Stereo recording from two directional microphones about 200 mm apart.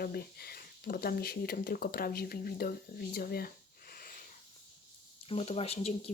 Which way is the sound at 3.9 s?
45° left (ahead or behind).